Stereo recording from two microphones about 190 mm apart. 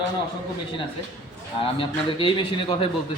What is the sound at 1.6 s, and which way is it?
A man's voice, 25° left (ahead or behind).